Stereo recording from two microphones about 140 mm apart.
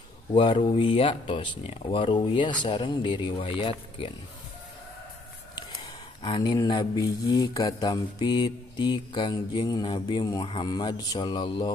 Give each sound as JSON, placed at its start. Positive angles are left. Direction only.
{"t": 0.3, "sound": "speech", "side_deg": 40}
{"t": 6.2, "sound": "speech", "side_deg": 35}